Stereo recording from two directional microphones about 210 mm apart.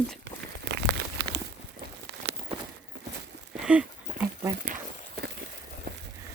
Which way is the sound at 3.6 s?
5° right (ahead or behind).